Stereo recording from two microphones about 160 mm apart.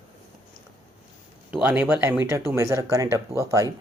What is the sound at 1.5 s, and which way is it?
Speech, 10° right (ahead or behind).